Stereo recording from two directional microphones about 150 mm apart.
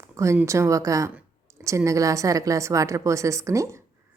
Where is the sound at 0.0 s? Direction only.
20° right (ahead or behind).